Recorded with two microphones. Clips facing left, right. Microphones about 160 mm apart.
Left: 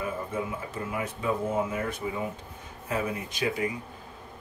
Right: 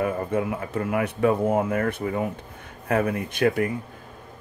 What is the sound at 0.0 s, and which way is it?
Speech, 65° right (ahead or behind).